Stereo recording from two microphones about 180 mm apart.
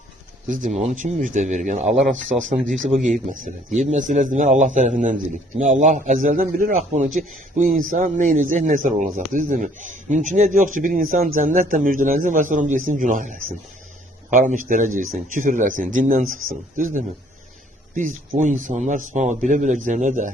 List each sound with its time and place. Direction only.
0.4 s speech: 45° right (ahead or behind)
2.9 s speech: 45° right (ahead or behind)